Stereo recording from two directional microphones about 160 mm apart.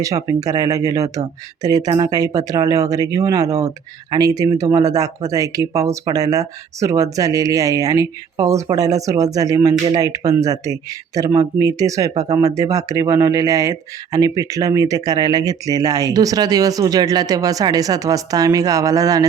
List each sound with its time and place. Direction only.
0.0 s speech: 20° right (ahead or behind)